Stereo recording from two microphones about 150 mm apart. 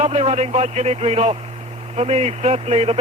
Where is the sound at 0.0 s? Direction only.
45° right (ahead or behind).